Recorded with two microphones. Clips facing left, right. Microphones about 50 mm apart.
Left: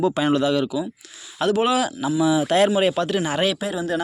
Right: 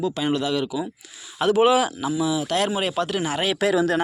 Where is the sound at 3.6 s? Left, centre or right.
Right.